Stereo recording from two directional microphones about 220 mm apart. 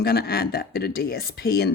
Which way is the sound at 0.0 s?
45° left (ahead or behind).